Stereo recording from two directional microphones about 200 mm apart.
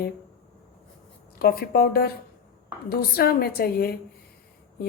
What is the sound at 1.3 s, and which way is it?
Speech, 50° left (ahead or behind).